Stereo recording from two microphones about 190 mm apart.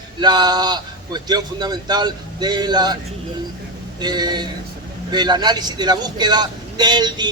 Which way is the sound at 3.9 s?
20° right (ahead or behind).